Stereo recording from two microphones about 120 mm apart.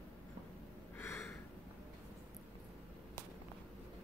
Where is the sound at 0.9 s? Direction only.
20° left (ahead or behind).